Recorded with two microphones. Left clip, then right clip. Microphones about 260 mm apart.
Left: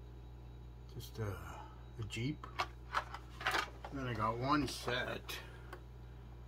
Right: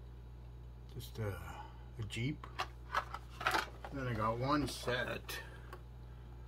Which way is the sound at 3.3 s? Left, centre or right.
Right.